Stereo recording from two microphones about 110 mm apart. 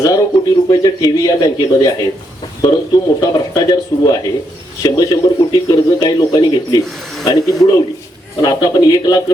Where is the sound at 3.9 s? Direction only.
45° left (ahead or behind).